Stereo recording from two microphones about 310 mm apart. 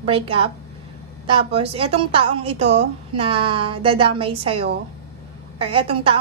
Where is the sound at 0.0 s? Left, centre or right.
Centre.